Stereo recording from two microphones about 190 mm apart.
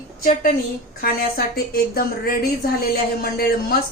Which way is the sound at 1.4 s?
55° left (ahead or behind).